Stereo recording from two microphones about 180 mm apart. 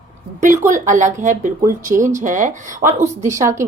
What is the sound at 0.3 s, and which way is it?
Speech, 45° right (ahead or behind).